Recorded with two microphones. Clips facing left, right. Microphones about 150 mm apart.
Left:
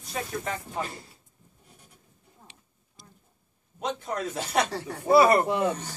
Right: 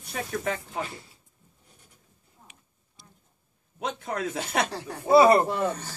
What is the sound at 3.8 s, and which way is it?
Speech, 60° right (ahead or behind).